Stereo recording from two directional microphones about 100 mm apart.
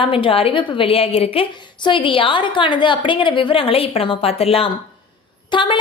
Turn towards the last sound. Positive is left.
turn(degrees=55)  # may be behind; listen again after turning